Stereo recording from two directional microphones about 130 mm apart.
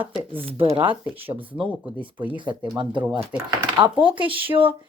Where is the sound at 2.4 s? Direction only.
35° right (ahead or behind).